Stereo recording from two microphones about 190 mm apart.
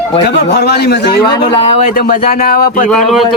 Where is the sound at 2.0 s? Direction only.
45° left (ahead or behind).